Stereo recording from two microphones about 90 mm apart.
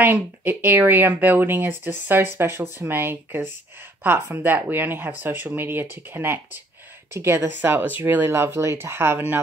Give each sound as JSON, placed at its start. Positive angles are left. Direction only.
{"t": 0.0, "sound": "speech", "side_deg": -20}